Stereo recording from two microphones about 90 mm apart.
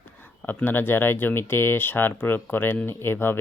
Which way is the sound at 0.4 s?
20° left (ahead or behind).